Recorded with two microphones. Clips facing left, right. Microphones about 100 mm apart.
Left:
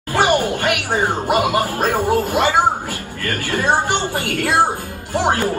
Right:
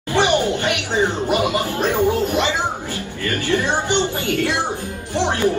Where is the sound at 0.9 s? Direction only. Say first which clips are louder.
Even; 45° left (ahead or behind).